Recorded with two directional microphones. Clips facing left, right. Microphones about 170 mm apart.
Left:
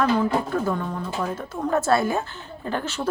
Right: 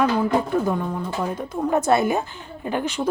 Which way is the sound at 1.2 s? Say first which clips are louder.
Right 4 dB; 15° right (ahead or behind).